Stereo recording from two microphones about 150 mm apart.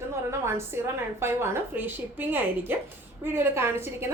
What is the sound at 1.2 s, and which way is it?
A woman's voice, 15° right (ahead or behind).